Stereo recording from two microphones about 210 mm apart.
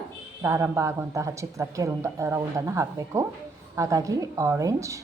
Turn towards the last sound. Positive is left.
turn(degrees=-15)  # may be behind; listen again after turning